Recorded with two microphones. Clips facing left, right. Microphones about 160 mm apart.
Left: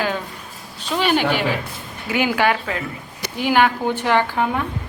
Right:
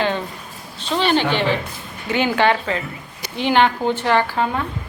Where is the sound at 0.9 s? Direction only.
10° left (ahead or behind).